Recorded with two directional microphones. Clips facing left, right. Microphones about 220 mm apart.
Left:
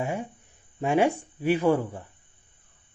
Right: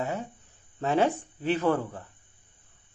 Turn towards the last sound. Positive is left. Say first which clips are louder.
# left 3 dB
turn(degrees=10)  # may be behind; listen again after turning